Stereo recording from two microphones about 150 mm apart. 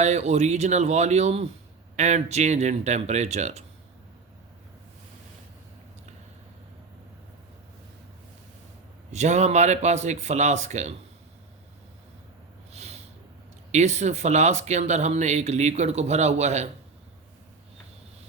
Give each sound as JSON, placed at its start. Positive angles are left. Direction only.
{"t": 0.0, "sound": "speech", "side_deg": -50}
{"t": 9.1, "sound": "speech", "side_deg": -50}
{"t": 12.7, "sound": "snort", "side_deg": -45}
{"t": 13.7, "sound": "speech", "side_deg": -50}